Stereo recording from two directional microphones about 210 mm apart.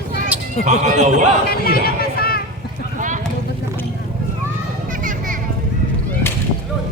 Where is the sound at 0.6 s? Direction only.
35° right (ahead or behind).